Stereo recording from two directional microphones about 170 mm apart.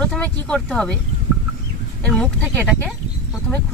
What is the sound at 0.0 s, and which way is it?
Speech, 5° left (ahead or behind).